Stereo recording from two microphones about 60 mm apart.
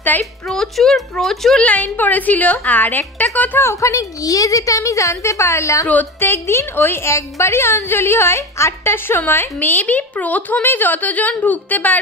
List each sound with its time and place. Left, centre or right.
0.1 s a woman's voice: left
0.5 s a woman's voice: centre
1.6 s a woman's voice: left
3.6 s a woman's voice: left
5.9 s a woman's voice: left
6.2 s a woman's voice: left